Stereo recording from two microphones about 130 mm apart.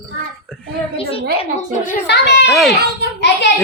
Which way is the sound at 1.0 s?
45° left (ahead or behind).